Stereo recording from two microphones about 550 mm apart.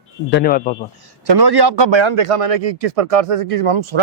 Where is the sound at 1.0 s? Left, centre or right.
Right.